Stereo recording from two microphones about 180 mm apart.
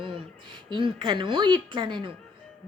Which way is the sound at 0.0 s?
25° right (ahead or behind).